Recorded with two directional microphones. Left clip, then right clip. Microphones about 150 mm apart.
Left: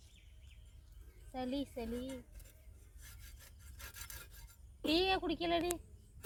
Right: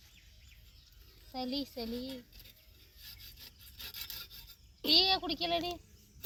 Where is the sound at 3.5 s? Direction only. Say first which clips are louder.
Right 6 dB; 5° right (ahead or behind).